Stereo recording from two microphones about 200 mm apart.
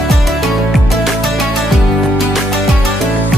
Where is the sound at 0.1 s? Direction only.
Centre (ahead or behind).